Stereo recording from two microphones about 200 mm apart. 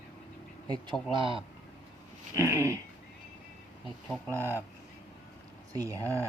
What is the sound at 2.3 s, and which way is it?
Speech, 15° right (ahead or behind).